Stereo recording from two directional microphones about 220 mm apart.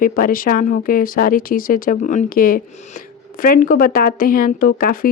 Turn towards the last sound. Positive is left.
turn(degrees=40)  # may be behind; listen again after turning